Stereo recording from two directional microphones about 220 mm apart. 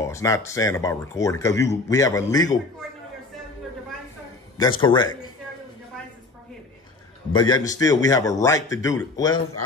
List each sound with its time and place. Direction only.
0.0 s speech: 15° left (ahead or behind)
4.6 s a man's voice: 20° left (ahead or behind)
7.3 s speech: 20° left (ahead or behind)